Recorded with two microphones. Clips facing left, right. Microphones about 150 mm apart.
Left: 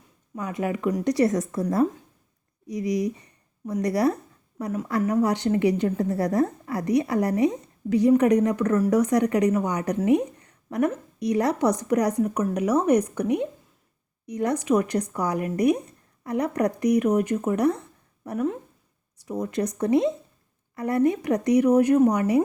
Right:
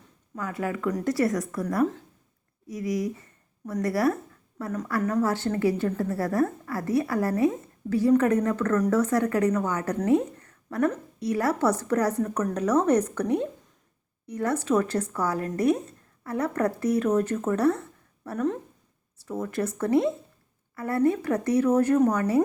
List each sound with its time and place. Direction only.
0.3 s a woman's voice: 20° left (ahead or behind)